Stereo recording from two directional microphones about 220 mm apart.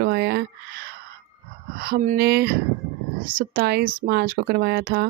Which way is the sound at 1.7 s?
40° right (ahead or behind).